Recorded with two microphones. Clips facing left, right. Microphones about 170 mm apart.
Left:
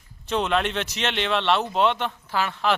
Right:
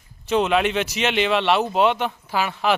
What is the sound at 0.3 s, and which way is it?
Speech, 5° right (ahead or behind).